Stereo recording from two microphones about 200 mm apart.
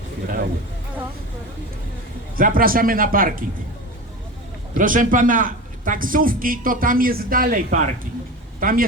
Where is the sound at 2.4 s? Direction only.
45° right (ahead or behind).